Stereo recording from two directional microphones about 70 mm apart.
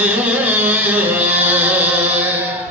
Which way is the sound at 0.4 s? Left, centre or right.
Right.